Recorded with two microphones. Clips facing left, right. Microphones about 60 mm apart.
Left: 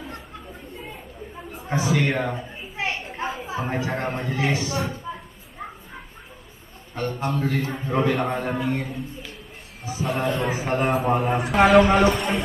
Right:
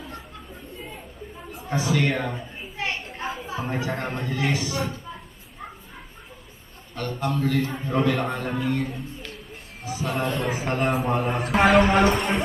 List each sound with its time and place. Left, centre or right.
1.6 s children playing: left
3.2 s speech: centre
4.7 s a man's voice: centre
7.0 s a man's voice: left
7.7 s a man's voice: centre
8.8 s a man's voice: centre